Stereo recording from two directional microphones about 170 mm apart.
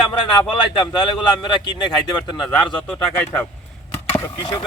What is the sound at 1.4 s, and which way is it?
Speech, 30° left (ahead or behind).